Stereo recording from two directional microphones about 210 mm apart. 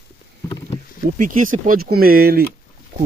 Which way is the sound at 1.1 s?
40° right (ahead or behind).